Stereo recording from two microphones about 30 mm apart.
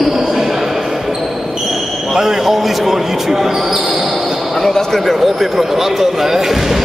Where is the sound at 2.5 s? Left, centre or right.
Centre.